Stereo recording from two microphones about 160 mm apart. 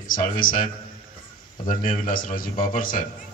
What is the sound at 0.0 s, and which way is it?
Speech, 60° left (ahead or behind).